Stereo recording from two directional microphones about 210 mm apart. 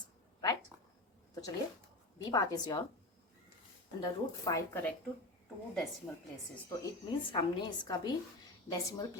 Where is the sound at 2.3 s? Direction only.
20° left (ahead or behind).